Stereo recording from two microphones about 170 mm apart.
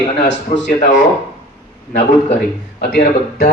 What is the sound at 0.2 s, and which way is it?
Speech, 90° left.